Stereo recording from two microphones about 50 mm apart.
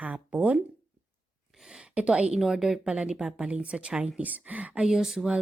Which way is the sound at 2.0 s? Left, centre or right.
Right.